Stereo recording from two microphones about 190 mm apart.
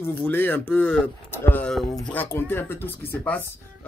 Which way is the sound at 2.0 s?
10° left (ahead or behind).